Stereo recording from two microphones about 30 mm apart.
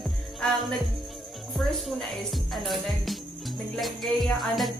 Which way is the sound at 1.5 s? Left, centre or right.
Centre.